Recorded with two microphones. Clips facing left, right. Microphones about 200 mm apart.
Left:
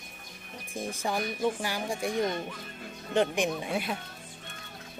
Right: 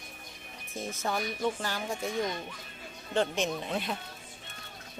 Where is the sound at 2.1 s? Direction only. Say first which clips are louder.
Left 4 dB; 45° left (ahead or behind).